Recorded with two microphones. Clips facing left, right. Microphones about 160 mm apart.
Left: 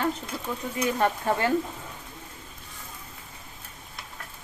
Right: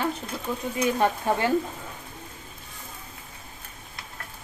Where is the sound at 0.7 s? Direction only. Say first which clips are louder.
Right 1 dB; 20° right (ahead or behind).